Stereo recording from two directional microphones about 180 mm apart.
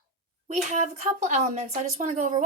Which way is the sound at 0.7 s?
45° right (ahead or behind).